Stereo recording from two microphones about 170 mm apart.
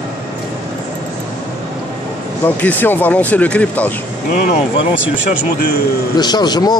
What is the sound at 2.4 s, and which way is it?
Speech, 10° left (ahead or behind).